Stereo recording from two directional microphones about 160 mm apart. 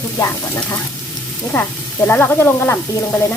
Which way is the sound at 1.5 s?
10° left (ahead or behind).